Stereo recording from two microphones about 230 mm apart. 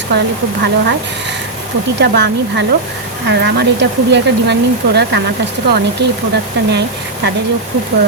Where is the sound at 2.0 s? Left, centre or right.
Right.